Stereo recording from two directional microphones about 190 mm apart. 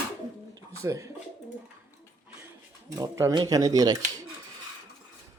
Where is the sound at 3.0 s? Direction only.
20° right (ahead or behind).